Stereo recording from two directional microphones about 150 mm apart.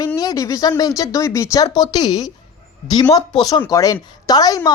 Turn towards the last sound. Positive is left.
turn(degrees=25)  # may be behind; listen again after turning